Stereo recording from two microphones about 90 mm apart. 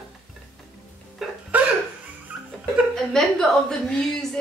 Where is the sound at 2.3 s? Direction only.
15° right (ahead or behind).